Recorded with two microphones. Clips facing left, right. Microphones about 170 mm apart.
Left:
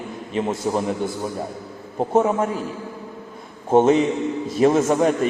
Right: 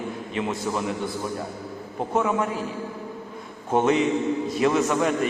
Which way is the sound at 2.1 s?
45° left (ahead or behind).